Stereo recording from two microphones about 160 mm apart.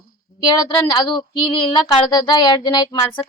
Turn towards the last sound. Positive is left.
turn(degrees=30)  # may be behind; listen again after turning